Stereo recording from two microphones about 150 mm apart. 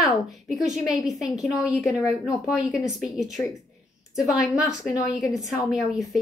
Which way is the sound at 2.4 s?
Centre (ahead or behind).